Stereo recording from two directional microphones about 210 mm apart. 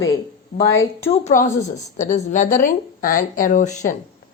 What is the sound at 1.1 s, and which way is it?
A woman's voice, 35° left (ahead or behind).